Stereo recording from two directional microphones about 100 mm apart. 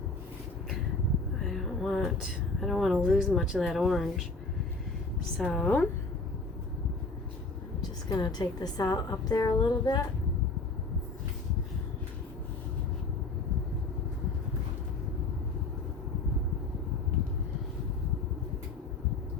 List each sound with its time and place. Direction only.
1.5 s a sound: centre (ahead or behind)
2.6 s speech: centre (ahead or behind)
5.4 s a woman's voice: 10° left (ahead or behind)
8.1 s a woman's voice: 45° left (ahead or behind)